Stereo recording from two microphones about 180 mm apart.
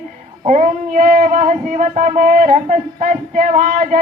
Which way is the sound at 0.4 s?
40° right (ahead or behind).